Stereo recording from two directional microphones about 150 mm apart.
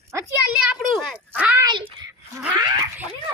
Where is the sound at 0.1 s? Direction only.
15° right (ahead or behind).